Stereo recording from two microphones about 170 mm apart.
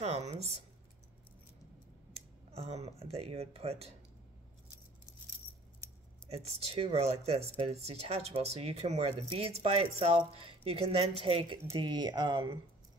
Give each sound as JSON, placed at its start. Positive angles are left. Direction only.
{"t": 0.0, "sound": "speech", "side_deg": -40}
{"t": 2.1, "sound": "speech", "side_deg": -35}
{"t": 5.8, "sound": "scissors", "side_deg": 15}
{"t": 6.2, "sound": "speech", "side_deg": -35}